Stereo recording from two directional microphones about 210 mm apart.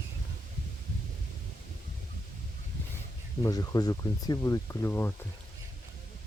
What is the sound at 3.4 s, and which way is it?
Speech, 20° left (ahead or behind).